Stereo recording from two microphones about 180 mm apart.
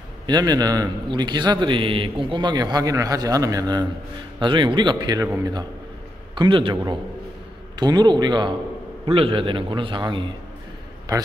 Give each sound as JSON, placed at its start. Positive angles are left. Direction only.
{"t": 0.3, "sound": "a man's voice", "side_deg": -20}
{"t": 7.8, "sound": "a man's voice", "side_deg": -25}